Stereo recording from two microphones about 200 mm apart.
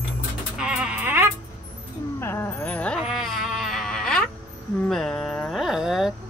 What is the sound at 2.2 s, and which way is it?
Vehicle, 10° left (ahead or behind).